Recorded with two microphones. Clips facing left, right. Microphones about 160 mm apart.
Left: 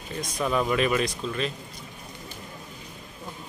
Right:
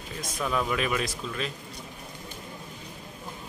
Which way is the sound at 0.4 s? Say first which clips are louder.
Left 4 dB; 10° left (ahead or behind).